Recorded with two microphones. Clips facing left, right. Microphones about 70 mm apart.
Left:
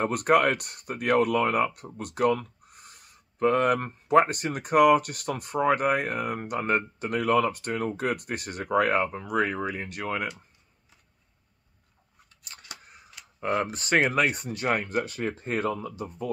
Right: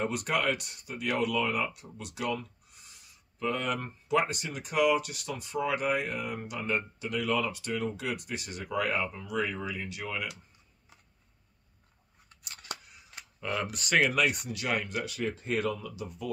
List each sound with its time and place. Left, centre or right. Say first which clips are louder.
0.0 s speech: left 8 dB; left
12.8 s a sound: left 4 dB; left
13.4 s speech: left 6 dB; left